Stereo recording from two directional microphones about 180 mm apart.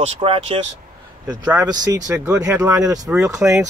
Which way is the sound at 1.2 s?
20° right (ahead or behind).